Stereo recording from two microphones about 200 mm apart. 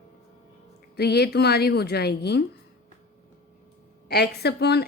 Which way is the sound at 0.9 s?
55° left (ahead or behind).